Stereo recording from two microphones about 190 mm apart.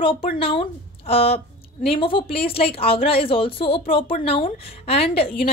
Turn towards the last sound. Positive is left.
turn(degrees=30)  # may be behind; listen again after turning